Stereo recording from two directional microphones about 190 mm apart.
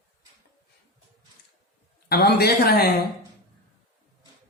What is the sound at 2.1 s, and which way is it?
Speech, 55° left (ahead or behind).